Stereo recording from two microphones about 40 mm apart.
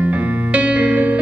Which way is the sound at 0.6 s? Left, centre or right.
Right.